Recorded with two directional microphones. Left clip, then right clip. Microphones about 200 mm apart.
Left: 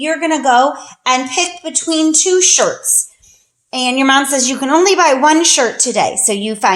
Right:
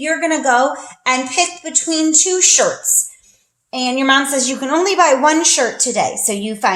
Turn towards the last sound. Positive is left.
turn(degrees=35)  # may be behind; listen again after turning